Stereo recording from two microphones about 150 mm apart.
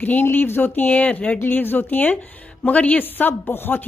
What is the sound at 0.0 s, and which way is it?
Speech, 10° left (ahead or behind).